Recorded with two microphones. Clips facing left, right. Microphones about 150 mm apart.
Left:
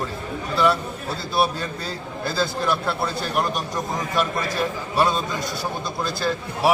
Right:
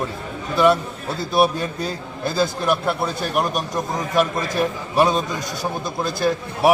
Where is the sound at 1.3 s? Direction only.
20° right (ahead or behind).